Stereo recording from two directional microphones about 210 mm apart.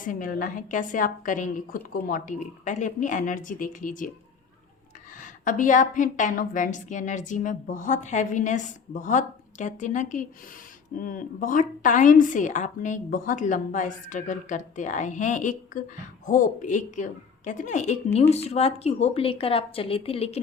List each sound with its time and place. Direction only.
0.1 s a woman's voice: 40° left (ahead or behind)
5.2 s a woman's voice: 40° left (ahead or behind)